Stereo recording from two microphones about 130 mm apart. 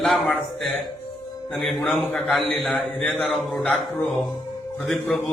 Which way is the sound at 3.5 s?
10° left (ahead or behind).